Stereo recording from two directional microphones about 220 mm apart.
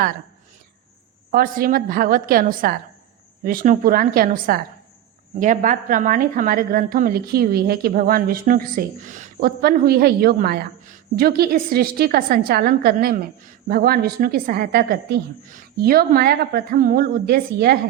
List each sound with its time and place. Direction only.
1.3 s a woman's voice: 40° right (ahead or behind)